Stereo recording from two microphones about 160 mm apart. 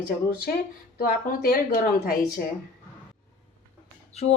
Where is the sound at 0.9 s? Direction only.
65° left (ahead or behind).